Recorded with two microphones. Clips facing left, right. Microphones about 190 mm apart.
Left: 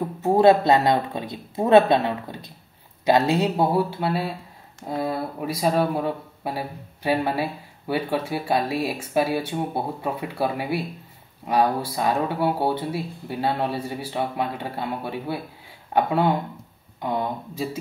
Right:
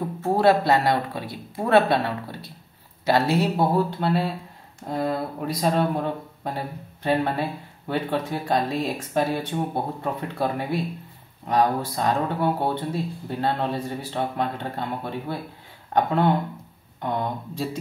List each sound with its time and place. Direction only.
0.2 s speech: 20° left (ahead or behind)